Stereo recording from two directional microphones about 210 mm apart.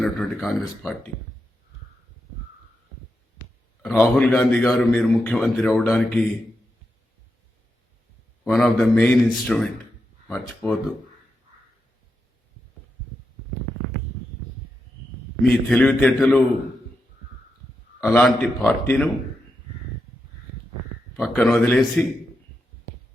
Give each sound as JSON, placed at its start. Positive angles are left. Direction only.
{"t": 0.0, "sound": "a man's voice", "side_deg": 0}
{"t": 3.8, "sound": "a man's voice", "side_deg": 0}
{"t": 8.4, "sound": "a man's voice", "side_deg": 0}
{"t": 15.4, "sound": "a man's voice", "side_deg": 5}
{"t": 18.0, "sound": "a man's voice", "side_deg": 5}
{"t": 21.2, "sound": "a man's voice", "side_deg": 0}